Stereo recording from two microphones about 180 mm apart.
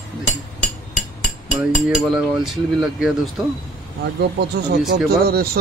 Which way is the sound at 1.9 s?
5° right (ahead or behind).